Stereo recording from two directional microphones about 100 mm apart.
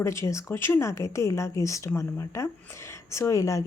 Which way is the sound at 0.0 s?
30° left (ahead or behind).